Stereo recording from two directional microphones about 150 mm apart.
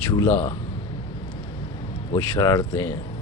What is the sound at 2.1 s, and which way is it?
Speech, 25° left (ahead or behind).